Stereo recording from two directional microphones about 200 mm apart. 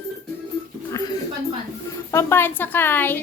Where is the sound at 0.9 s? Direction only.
15° left (ahead or behind).